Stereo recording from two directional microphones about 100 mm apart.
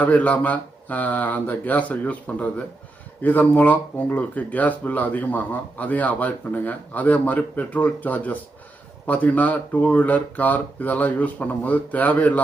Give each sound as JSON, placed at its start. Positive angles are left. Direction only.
{"t": 0.0, "sound": "speech", "side_deg": 15}